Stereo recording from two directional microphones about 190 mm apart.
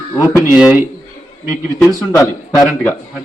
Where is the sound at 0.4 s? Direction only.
10° right (ahead or behind).